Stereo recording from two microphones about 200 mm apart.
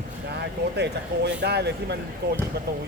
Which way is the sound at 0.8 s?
55° right (ahead or behind).